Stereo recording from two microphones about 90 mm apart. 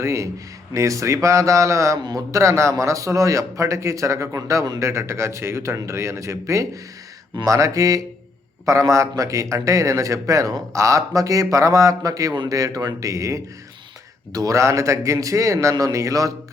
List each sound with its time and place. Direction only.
0.0 s a man's voice: 35° right (ahead or behind)